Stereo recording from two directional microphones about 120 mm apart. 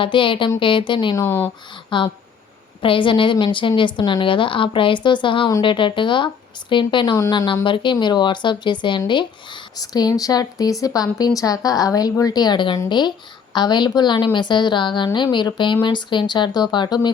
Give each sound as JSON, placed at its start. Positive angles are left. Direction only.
{"t": 0.0, "sound": "a woman's voice", "side_deg": 45}
{"t": 1.1, "sound": "speech", "side_deg": 20}
{"t": 1.9, "sound": "a woman's voice", "side_deg": 40}